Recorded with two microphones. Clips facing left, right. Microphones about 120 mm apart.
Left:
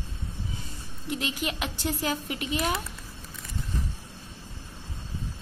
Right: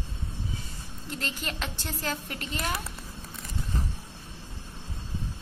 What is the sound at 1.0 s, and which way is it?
Speech, 10° left (ahead or behind).